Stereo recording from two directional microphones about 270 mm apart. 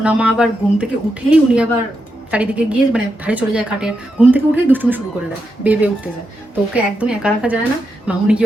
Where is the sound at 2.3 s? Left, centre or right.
Centre.